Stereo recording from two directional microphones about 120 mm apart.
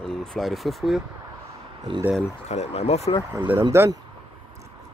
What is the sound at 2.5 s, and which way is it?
Speech, 65° left (ahead or behind).